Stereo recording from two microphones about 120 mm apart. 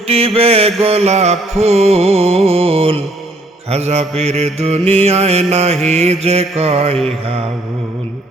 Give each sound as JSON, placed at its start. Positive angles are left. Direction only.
{"t": 0.1, "sound": "music", "side_deg": -55}